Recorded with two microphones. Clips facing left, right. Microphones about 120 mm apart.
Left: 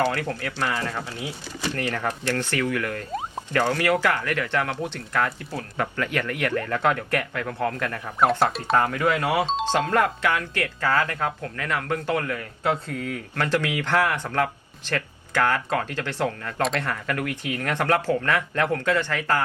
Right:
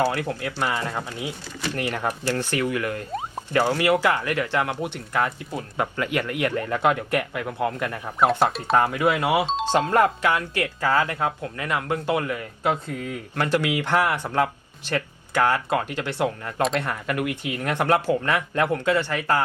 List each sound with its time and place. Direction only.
0.1 s speech: 15° right (ahead or behind)
3.1 s a sound: centre (ahead or behind)
3.5 s speech: 15° right (ahead or behind)
8.2 s speech: centre (ahead or behind)
8.7 s speech: 15° right (ahead or behind)